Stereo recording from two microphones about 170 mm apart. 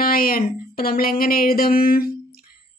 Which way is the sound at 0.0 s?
60° left (ahead or behind).